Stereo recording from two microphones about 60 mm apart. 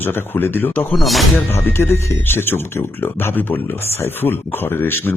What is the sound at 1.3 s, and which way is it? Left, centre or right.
Speech, left.